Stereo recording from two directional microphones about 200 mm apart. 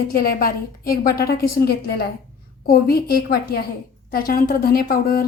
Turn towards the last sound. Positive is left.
turn(degrees=45)  # may be behind; listen again after turning